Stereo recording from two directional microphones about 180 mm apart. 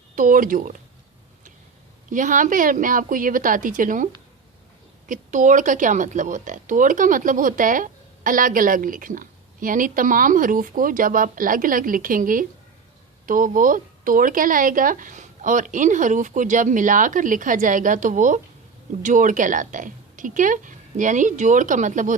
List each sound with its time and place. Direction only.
0.2 s speech: 50° right (ahead or behind)
2.0 s speech: 45° right (ahead or behind)